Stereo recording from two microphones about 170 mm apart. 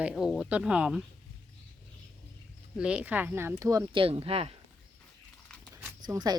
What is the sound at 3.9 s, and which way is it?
Speech, 35° right (ahead or behind).